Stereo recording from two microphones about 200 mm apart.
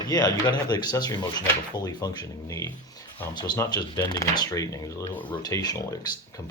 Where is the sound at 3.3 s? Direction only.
20° left (ahead or behind).